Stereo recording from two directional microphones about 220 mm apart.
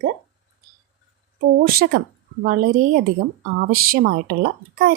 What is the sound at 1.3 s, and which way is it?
A woman's voice, 40° right (ahead or behind).